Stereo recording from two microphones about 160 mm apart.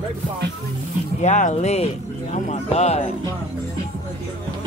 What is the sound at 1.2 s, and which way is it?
Speech, 50° left (ahead or behind).